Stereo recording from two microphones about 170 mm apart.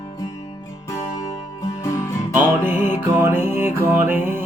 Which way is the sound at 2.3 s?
10° right (ahead or behind).